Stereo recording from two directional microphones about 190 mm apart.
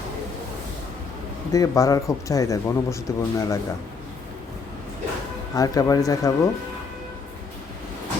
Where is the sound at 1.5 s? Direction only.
15° left (ahead or behind).